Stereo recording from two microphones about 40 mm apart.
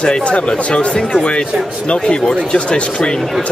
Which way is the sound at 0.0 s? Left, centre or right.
Left.